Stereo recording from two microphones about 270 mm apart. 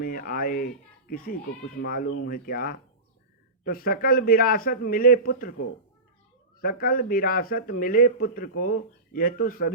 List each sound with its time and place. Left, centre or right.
0.0 s speech: left
6.6 s speech: left